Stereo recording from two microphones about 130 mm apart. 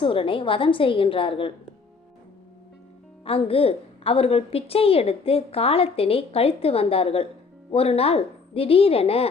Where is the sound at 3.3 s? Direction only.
45° left (ahead or behind).